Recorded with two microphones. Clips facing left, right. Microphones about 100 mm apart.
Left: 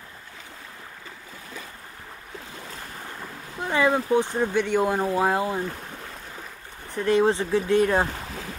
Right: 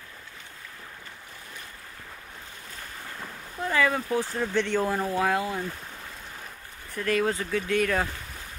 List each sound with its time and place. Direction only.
3.6 s speech: 25° left (ahead or behind)
4.9 s speech: 25° left (ahead or behind)
6.9 s speech: 25° left (ahead or behind)
8.1 s boat: 90° left